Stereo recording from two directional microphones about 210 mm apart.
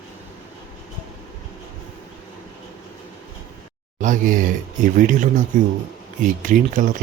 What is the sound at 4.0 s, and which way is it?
Speech, 35° right (ahead or behind).